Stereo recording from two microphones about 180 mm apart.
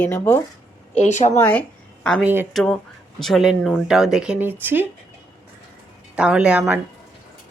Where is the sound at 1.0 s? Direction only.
40° left (ahead or behind).